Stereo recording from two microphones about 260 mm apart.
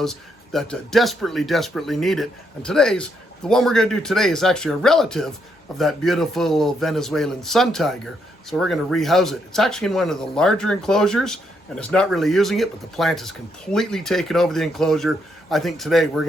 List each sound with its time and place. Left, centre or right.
0.0 s speech: centre